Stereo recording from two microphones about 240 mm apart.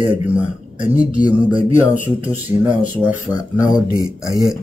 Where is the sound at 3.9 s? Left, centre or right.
Centre.